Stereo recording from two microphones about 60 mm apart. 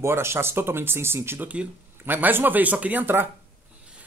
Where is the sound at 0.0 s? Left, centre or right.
Right.